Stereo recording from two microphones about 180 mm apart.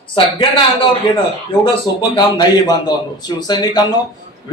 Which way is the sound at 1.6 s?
25° left (ahead or behind).